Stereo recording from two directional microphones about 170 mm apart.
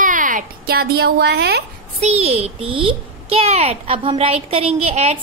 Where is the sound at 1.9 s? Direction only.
40° right (ahead or behind).